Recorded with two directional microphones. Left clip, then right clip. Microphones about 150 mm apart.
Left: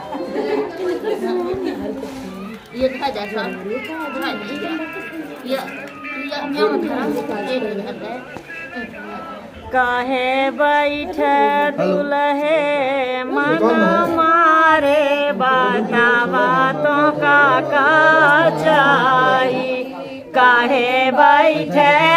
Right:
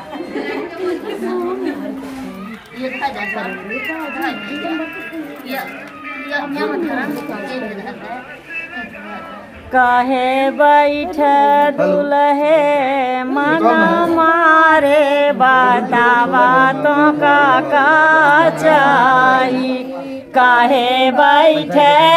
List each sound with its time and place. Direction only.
9.7 s music: 25° right (ahead or behind)